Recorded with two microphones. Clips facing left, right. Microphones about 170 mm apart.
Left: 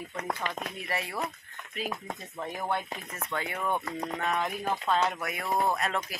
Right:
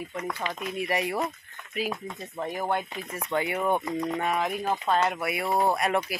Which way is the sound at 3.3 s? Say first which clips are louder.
Right 6 dB; 15° right (ahead or behind).